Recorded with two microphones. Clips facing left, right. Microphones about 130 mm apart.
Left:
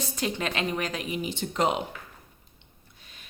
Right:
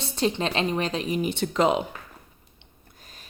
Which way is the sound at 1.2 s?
60° right (ahead or behind).